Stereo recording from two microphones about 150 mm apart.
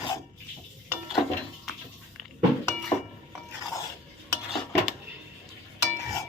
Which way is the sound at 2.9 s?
30° left (ahead or behind).